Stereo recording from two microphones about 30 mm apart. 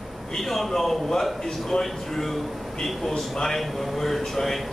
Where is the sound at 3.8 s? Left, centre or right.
Centre.